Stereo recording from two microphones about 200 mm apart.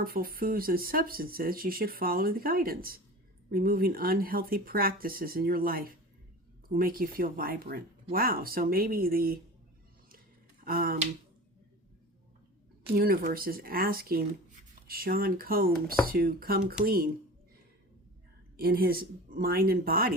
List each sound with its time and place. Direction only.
0.0 s speech: 45° right (ahead or behind)
10.6 s a sound: 45° right (ahead or behind)
13.0 s speech: 45° right (ahead or behind)
18.5 s speech: 50° right (ahead or behind)